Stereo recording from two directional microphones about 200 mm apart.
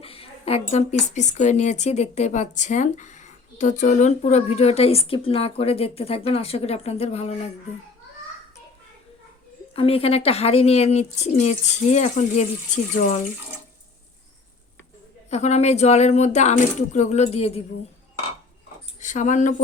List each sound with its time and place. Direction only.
0.0 s a woman's voice: 30° left (ahead or behind)
9.7 s a woman's voice: 30° left (ahead or behind)
15.3 s a woman's voice: 35° left (ahead or behind)
18.9 s speech: 40° left (ahead or behind)